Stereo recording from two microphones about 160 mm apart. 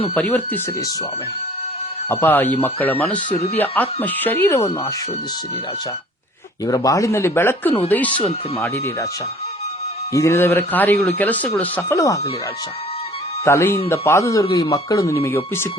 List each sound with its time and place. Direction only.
0.1 s speech: 10° left (ahead or behind)
2.0 s speech: 10° left (ahead or behind)
3.2 s speech: 40° left (ahead or behind)
3.6 s speech: 10° left (ahead or behind)
6.7 s speech: 20° left (ahead or behind)
10.1 s speech: 20° left (ahead or behind)
13.4 s speech: 15° left (ahead or behind)